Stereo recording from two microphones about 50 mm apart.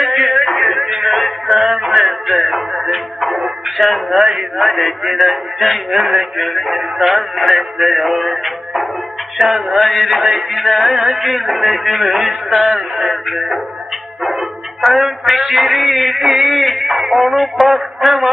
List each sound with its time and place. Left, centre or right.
0.0 s music: centre
3.7 s a man's voice: centre